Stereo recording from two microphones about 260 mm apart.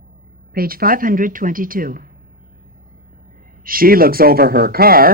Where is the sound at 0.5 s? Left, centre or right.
Right.